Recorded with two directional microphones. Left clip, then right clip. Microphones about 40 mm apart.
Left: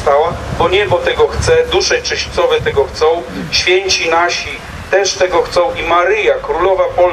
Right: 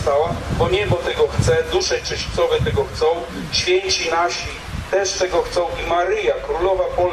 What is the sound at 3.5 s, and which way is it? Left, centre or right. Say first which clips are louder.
Speech: left 6 dB; left.